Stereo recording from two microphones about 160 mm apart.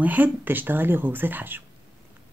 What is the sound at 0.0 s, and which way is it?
Speech, 10° right (ahead or behind).